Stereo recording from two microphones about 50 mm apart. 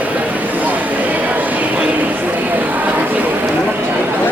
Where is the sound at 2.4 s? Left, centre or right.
Right.